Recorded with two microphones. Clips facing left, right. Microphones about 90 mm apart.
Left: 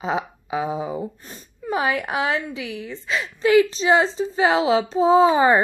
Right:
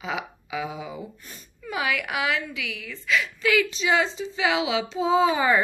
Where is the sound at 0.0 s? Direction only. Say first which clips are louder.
Left 6 dB; 35° left (ahead or behind).